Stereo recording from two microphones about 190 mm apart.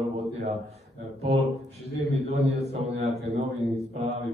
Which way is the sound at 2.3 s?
35° right (ahead or behind).